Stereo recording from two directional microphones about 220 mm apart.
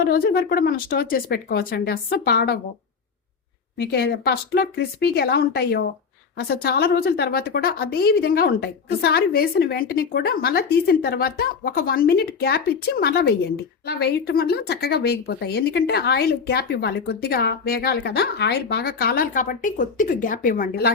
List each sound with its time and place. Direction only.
0.0 s speech: 45° left (ahead or behind)
3.8 s speech: 50° left (ahead or behind)